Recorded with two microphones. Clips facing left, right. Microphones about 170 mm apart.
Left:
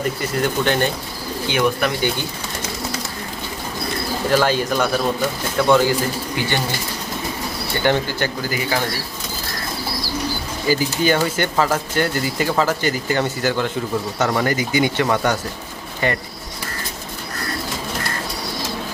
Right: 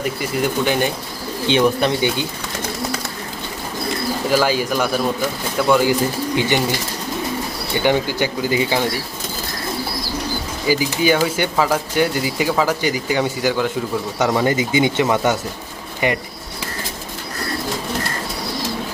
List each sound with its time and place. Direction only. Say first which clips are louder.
0.0 s speech: even; 5° right (ahead or behind)
1.5 s speech: right 4 dB; 25° right (ahead or behind)
4.3 s speech: even; 5° right (ahead or behind)
6.3 s speech: right 6 dB; 15° right (ahead or behind)
7.8 s speech: right 2 dB; 10° right (ahead or behind)
10.7 s speech: right 1 dB; 10° right (ahead or behind)